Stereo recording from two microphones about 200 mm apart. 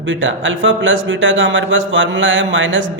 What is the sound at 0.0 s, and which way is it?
A man's voice, 65° right (ahead or behind).